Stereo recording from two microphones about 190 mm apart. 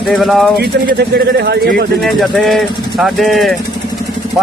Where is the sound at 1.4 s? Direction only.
55° right (ahead or behind).